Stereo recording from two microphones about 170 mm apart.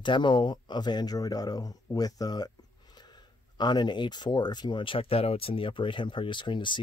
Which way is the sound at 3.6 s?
25° left (ahead or behind).